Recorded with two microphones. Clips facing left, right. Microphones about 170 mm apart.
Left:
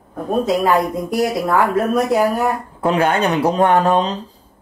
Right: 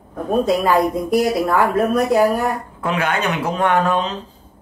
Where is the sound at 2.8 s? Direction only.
35° left (ahead or behind).